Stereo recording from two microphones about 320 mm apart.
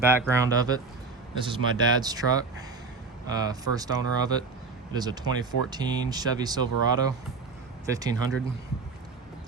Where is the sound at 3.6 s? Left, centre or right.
Centre.